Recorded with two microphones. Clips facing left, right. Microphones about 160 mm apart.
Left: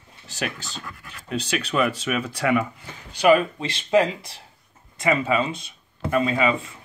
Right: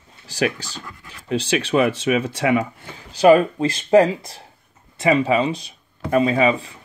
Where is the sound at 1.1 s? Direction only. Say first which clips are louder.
Right 6 dB; 30° right (ahead or behind).